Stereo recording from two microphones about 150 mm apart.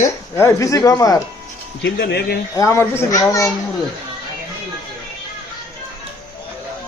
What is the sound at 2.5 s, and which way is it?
A child's voice, 20° left (ahead or behind).